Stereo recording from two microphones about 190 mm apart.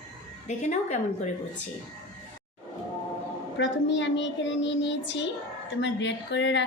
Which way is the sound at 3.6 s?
70° left (ahead or behind).